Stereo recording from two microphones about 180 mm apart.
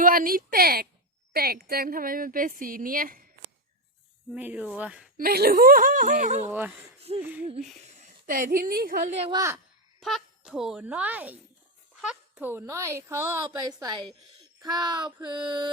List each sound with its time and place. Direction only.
0.0 s a woman's voice: 50° right (ahead or behind)
4.3 s speech: 10° right (ahead or behind)
5.1 s a woman's voice: 60° right (ahead or behind); by 6.5 s 40° right (ahead or behind)
6.5 s speech: 10° right (ahead or behind)
7.9 s a woman's voice: 45° right (ahead or behind)
9.3 s speech: 15° right (ahead or behind)
10.0 s a woman's voice: centre (ahead or behind)
14.6 s speech: 20° right (ahead or behind)